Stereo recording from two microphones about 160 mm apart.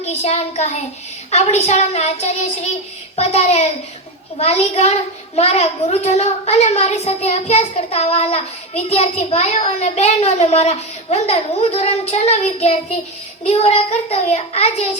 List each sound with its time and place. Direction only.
0.0 s a child's voice: 45° left (ahead or behind)
13.4 s child singing: 40° left (ahead or behind)